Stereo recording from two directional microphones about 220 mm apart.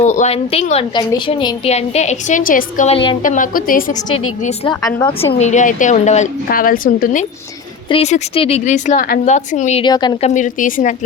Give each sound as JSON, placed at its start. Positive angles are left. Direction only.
{"t": 0.0, "sound": "a woman's voice", "side_deg": 35}
{"t": 3.2, "sound": "a woman's voice", "side_deg": 35}
{"t": 4.4, "sound": "a woman's voice", "side_deg": 20}
{"t": 5.4, "sound": "a woman's voice", "side_deg": 35}
{"t": 10.2, "sound": "a woman's voice", "side_deg": 35}